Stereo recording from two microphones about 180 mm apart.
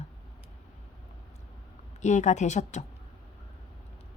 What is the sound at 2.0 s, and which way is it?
Speech, 40° left (ahead or behind).